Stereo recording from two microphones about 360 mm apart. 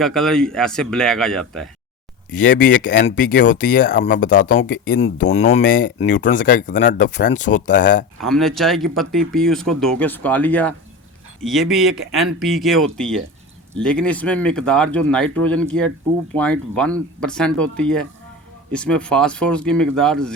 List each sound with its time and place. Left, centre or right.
0.0 s speech: centre
2.3 s speech: left
8.2 s speech: centre